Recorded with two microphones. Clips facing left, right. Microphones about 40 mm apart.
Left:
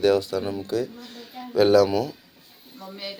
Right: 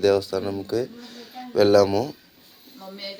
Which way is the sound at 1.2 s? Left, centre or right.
Centre.